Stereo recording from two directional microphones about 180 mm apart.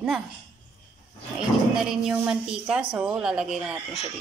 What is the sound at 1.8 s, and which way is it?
A woman's voice, 5° right (ahead or behind).